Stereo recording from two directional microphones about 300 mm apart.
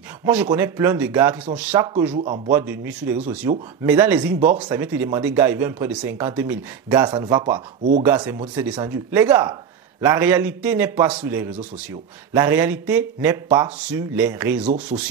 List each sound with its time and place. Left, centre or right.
0.2 s a man's voice: centre
2.5 s a man's voice: centre